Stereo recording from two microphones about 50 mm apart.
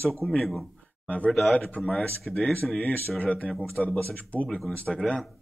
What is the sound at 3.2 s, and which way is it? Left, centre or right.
Speech, left.